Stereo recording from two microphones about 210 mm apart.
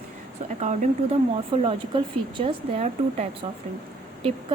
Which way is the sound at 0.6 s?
35° right (ahead or behind).